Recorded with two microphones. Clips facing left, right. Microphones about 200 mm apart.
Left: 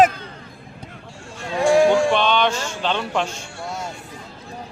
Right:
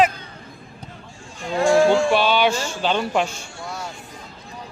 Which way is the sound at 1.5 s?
15° left (ahead or behind).